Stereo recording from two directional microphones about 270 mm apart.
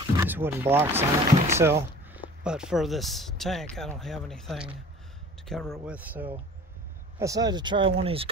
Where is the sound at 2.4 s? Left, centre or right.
Centre.